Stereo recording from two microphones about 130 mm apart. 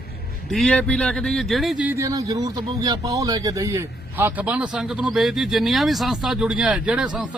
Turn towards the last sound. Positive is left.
turn(degrees=-10)  # may be behind; listen again after turning